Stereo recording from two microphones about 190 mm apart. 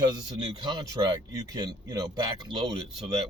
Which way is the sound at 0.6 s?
25° right (ahead or behind).